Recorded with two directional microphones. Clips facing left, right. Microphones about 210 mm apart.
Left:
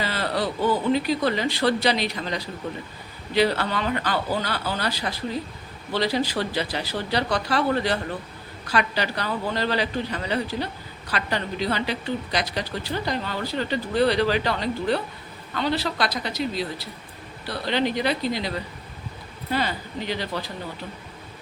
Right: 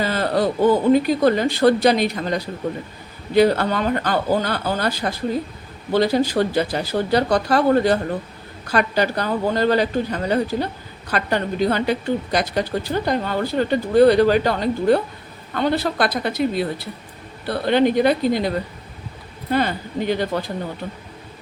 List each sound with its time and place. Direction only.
0.0 s a woman's voice: 50° right (ahead or behind)